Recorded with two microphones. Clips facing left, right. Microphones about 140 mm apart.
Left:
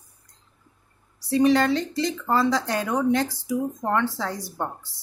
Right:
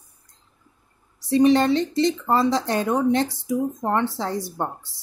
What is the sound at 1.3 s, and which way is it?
Speech, 25° right (ahead or behind).